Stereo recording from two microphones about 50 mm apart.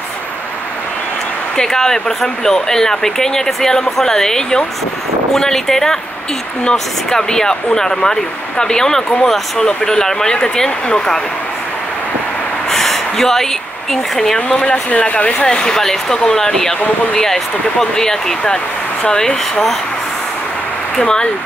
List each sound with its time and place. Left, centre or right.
1.6 s speech: centre
12.6 s a sound: centre
14.1 s speech: centre
14.6 s speech: left
15.4 s speech: centre
21.0 s speech: centre